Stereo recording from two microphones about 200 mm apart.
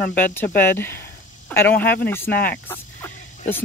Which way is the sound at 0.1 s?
10° left (ahead or behind).